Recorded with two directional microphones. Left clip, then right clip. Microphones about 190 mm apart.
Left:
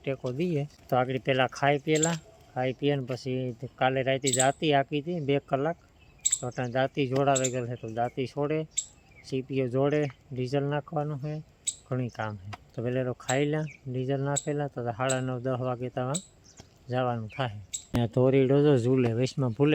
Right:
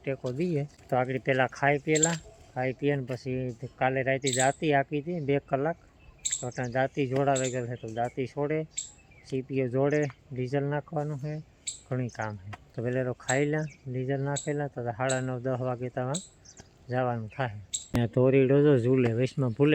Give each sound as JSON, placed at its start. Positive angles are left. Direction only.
{"t": 0.0, "sound": "speech", "side_deg": 10}